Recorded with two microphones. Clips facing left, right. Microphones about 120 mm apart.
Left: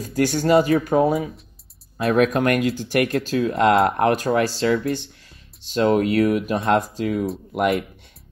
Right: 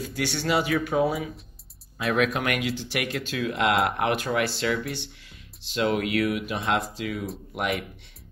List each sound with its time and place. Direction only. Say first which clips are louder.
0.0 s speech: left 8 dB; 45° left (ahead or behind)